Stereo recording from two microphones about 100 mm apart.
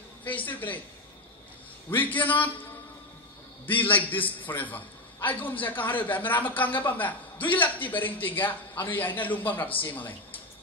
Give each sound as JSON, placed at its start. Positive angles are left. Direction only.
{"t": 0.2, "sound": "a man's voice", "side_deg": 15}
{"t": 2.0, "sound": "a man's voice", "side_deg": 15}
{"t": 3.6, "sound": "a man's voice", "side_deg": 15}